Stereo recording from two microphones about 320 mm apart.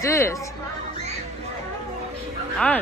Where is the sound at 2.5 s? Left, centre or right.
Centre.